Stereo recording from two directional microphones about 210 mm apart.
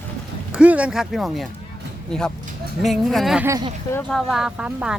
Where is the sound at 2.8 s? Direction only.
Centre (ahead or behind).